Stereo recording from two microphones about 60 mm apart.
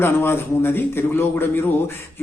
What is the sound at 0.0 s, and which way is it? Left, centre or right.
Speech, left.